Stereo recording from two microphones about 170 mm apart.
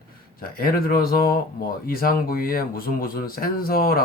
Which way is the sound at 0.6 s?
60° left (ahead or behind).